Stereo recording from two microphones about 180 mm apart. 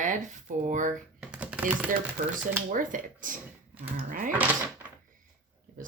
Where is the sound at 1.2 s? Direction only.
5° right (ahead or behind).